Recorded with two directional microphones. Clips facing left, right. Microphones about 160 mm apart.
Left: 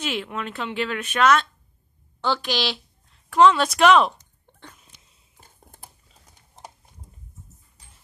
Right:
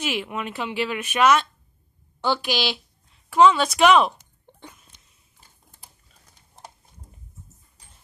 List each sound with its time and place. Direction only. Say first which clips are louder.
0.0 s speech: right 1 dB; 10° right (ahead or behind)
5.4 s typing: left 6 dB; 50° left (ahead or behind)